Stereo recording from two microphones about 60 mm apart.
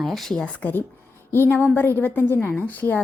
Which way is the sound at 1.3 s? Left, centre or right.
Left.